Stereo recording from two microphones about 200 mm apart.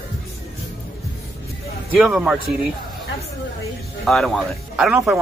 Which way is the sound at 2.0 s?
Centre (ahead or behind).